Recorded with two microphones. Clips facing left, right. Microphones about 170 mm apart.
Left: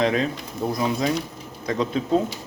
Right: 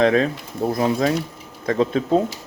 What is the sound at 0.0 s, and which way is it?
Speech, 50° right (ahead or behind).